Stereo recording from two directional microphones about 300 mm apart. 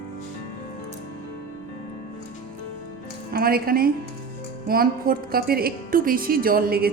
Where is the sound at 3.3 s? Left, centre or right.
Right.